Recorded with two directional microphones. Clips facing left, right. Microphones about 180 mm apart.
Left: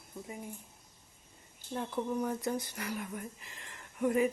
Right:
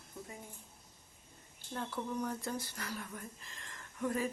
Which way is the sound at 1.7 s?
10° left (ahead or behind).